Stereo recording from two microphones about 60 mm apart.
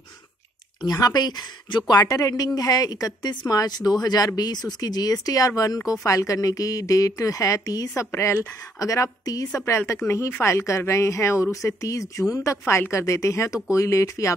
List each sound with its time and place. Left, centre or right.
0.8 s a woman's voice: left
1.9 s a woman's voice: left
7.9 s a woman's voice: left
8.7 s a woman's voice: left
9.7 s a woman's voice: left